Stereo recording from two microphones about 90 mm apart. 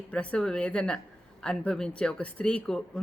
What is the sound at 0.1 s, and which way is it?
A woman's voice, 15° left (ahead or behind).